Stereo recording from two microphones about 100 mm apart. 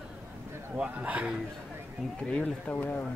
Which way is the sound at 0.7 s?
15° right (ahead or behind).